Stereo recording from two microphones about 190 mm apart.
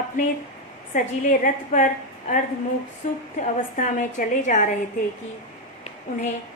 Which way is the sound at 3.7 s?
40° left (ahead or behind).